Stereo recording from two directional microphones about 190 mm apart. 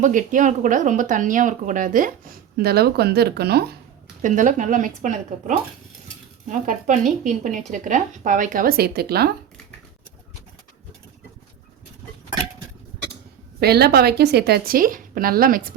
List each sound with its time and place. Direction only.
0.0 s speech: 45° right (ahead or behind)
4.2 s speech: 40° right (ahead or behind)
13.6 s speech: 55° right (ahead or behind)